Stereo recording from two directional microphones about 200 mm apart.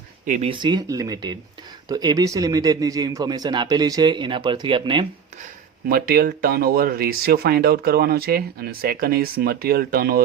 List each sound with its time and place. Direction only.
0.3 s speech: 40° right (ahead or behind)
0.5 s speech: 20° right (ahead or behind)
5.9 s speech: 45° right (ahead or behind)